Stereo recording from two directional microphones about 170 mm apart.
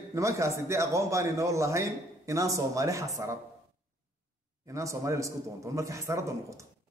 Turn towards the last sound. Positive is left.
turn(degrees=-15)  # may be behind; listen again after turning